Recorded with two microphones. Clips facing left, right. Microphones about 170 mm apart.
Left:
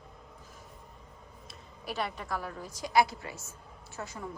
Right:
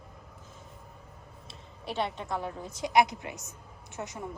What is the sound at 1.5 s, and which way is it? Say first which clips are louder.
A woman's voice: right 2 dB; 25° right (ahead or behind).